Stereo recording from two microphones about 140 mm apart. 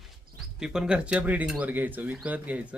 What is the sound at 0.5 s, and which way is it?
Speech, 5° right (ahead or behind).